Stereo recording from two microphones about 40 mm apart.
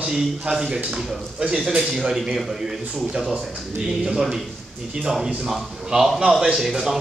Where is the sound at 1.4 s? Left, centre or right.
Right.